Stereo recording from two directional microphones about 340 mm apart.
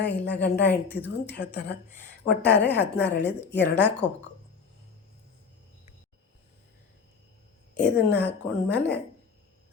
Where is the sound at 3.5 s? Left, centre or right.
Left.